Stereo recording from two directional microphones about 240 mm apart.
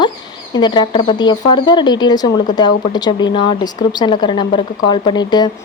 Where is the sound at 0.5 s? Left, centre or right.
Centre.